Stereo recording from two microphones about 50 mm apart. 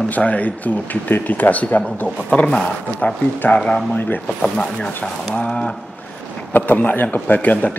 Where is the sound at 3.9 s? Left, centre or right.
Left.